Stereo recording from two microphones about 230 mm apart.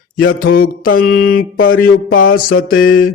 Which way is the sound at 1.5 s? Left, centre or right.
Left.